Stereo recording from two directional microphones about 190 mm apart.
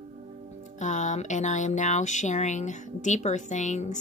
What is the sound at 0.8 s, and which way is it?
Speech, 40° left (ahead or behind).